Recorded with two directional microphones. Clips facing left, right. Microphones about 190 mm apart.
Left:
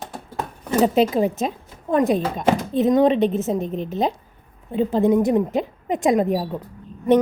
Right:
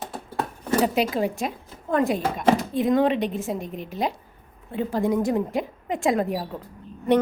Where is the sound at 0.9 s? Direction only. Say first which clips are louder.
Left 5 dB; 20° left (ahead or behind).